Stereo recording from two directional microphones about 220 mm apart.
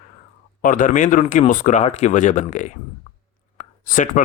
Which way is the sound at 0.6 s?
35° left (ahead or behind).